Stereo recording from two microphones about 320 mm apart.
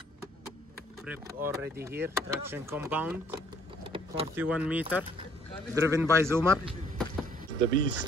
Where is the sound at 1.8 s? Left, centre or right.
Right.